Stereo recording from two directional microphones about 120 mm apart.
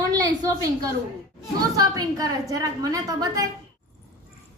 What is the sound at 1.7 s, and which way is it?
A woman's voice, 30° right (ahead or behind).